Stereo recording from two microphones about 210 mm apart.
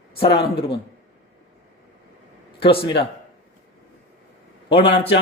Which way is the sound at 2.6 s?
25° left (ahead or behind).